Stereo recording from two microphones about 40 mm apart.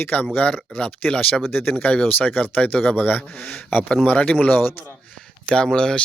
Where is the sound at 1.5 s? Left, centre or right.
Left.